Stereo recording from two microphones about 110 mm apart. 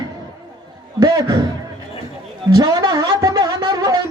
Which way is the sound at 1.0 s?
35° right (ahead or behind).